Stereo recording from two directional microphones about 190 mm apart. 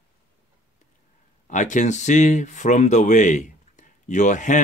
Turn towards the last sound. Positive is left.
turn(degrees=40)  # may be behind; listen again after turning